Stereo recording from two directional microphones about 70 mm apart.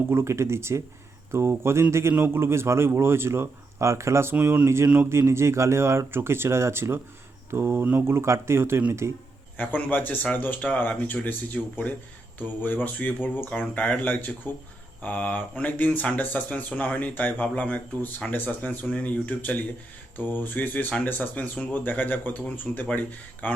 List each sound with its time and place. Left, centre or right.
0.1 s speech: right
9.6 s speech: left